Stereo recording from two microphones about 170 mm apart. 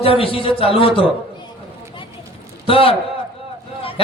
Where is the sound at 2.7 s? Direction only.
35° left (ahead or behind).